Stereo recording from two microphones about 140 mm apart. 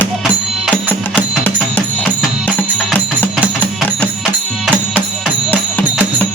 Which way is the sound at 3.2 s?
10° left (ahead or behind).